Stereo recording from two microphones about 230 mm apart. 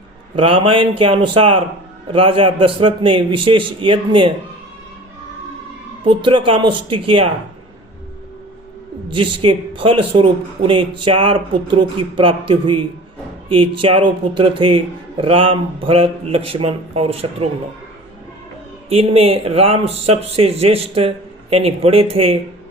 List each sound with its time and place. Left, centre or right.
0.3 s a man's voice: right
6.1 s a man's voice: right
9.0 s a man's voice: right
18.9 s a man's voice: right